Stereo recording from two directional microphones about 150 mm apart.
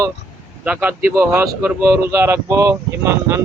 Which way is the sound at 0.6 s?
10° right (ahead or behind).